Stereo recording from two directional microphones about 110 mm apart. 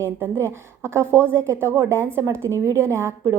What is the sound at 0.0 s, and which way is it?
A woman's voice, 25° right (ahead or behind).